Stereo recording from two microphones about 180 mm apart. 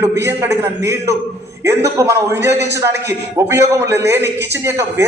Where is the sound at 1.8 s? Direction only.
15° right (ahead or behind).